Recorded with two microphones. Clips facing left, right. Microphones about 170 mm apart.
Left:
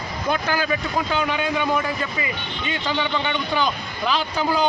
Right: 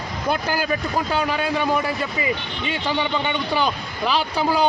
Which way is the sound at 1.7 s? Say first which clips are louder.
Right 1 dB; 10° right (ahead or behind).